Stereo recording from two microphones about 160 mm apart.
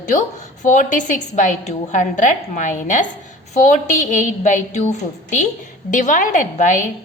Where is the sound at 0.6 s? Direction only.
50° left (ahead or behind).